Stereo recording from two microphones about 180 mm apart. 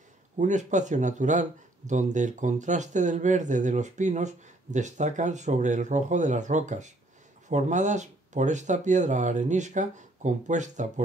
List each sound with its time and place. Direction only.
0.4 s speech: 40° right (ahead or behind)